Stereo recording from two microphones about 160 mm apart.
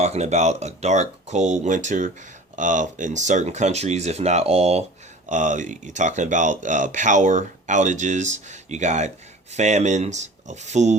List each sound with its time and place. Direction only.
0.0 s speech: 45° right (ahead or behind)